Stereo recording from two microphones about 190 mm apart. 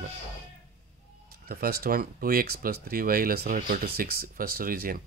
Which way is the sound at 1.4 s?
55° right (ahead or behind).